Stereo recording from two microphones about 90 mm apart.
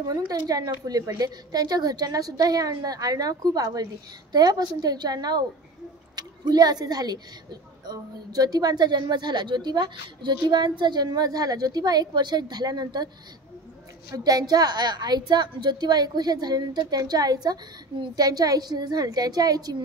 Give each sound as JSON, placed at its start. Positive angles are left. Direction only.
{"t": 0.1, "sound": "a woman's voice", "side_deg": -40}
{"t": 14.1, "sound": "a woman's voice", "side_deg": -45}